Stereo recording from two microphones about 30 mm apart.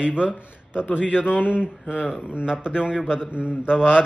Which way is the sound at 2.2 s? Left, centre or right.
Right.